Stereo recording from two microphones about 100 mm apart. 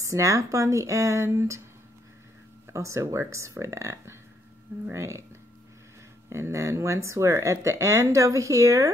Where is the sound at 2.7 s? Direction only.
30° right (ahead or behind).